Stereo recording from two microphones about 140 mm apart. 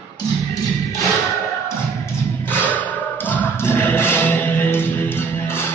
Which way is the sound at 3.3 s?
15° left (ahead or behind).